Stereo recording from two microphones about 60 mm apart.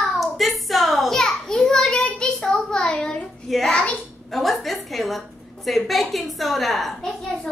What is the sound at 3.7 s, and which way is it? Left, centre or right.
Speech, centre.